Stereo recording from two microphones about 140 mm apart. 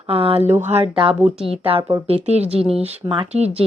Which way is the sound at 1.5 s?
40° right (ahead or behind).